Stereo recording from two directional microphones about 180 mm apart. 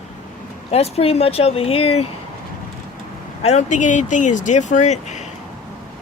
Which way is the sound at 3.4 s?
40° left (ahead or behind).